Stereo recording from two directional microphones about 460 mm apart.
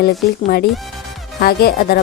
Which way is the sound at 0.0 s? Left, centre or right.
Centre.